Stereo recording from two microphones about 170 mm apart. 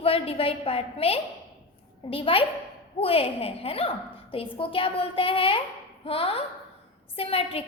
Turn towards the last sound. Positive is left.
turn(degrees=35)  # may be behind; listen again after turning